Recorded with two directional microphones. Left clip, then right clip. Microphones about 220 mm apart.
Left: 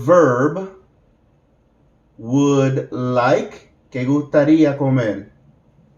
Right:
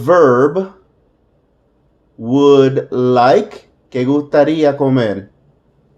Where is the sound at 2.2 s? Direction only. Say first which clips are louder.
Right 8 dB; 50° right (ahead or behind).